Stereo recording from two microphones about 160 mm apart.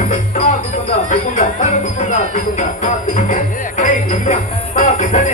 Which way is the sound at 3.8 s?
50° left (ahead or behind).